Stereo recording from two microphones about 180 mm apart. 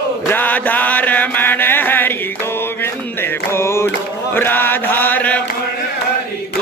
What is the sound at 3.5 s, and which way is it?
Chant, 15° left (ahead or behind).